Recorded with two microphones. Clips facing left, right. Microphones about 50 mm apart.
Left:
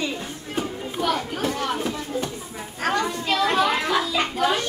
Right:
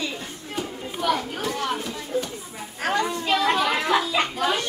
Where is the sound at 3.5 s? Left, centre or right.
Centre.